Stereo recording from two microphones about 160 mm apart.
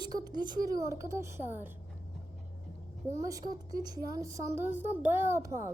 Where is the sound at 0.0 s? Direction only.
25° right (ahead or behind).